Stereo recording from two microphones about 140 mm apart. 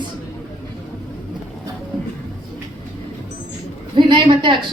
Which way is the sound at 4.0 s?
35° right (ahead or behind).